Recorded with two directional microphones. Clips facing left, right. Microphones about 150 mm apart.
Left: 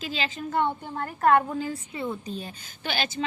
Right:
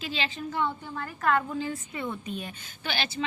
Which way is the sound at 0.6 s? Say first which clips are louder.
Left 4 dB; 55° left (ahead or behind).